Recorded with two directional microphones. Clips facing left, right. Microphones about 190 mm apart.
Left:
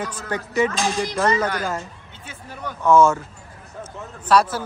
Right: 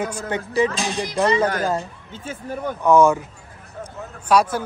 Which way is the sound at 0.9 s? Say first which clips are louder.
Right 1 dB; 20° right (ahead or behind).